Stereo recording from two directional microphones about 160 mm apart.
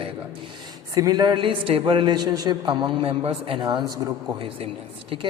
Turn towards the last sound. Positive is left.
turn(degrees=-35)  # may be behind; listen again after turning